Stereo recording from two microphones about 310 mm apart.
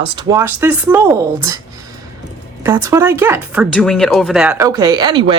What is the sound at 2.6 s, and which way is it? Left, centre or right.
Speech, centre.